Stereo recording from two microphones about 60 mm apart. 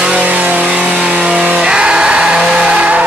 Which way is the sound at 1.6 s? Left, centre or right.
Centre.